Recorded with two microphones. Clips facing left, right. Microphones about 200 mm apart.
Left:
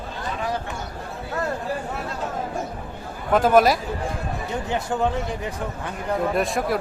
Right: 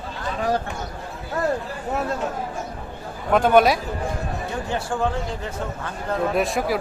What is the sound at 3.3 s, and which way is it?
Speech, centre (ahead or behind).